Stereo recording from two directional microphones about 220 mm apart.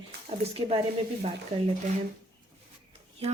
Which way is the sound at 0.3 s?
25° right (ahead or behind).